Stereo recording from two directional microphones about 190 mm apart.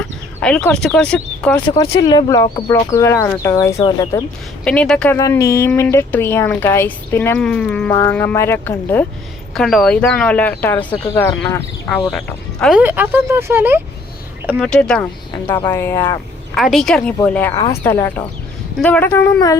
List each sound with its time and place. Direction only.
0.3 s speech: 10° left (ahead or behind)
2.0 s speech: 20° left (ahead or behind)
4.6 s speech: 5° left (ahead or behind)
5.1 s speech: 15° left (ahead or behind)
12.1 s speech: centre (ahead or behind)
12.8 s speech: 10° right (ahead or behind)
14.6 s speech: 5° left (ahead or behind)
16.6 s speech: centre (ahead or behind)
17.5 s speech: 20° left (ahead or behind)